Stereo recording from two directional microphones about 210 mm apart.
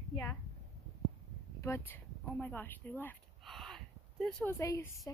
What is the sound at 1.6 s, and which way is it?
Speech, 10° left (ahead or behind).